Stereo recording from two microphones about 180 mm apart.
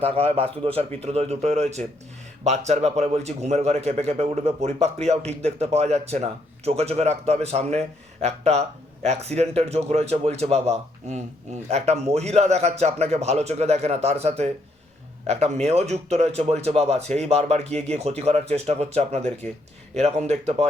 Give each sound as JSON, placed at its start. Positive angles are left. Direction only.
{"t": 0.0, "sound": "speech", "side_deg": -35}